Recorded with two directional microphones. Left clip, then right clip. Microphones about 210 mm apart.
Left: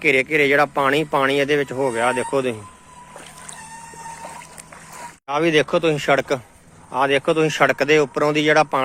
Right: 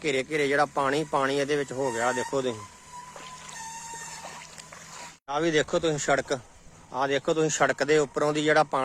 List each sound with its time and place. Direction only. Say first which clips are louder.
0.0 s speech: left 10 dB; centre (ahead or behind)
4.2 s boat: left 6 dB; 55° left (ahead or behind)
5.3 s speech: left 7 dB; centre (ahead or behind)